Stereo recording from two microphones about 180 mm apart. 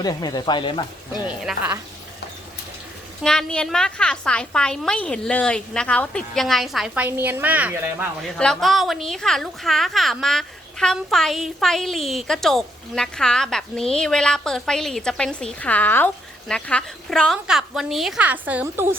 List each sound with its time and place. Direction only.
0.0 s speech: 20° left (ahead or behind)
1.3 s a woman's voice: 5° right (ahead or behind)
3.2 s a woman's voice: 5° left (ahead or behind)
8.4 s a woman's voice: centre (ahead or behind)